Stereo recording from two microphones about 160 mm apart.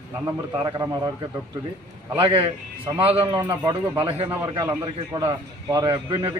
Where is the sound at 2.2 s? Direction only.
35° right (ahead or behind).